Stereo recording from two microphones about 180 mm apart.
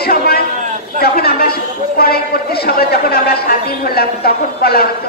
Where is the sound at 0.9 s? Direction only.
55° left (ahead or behind).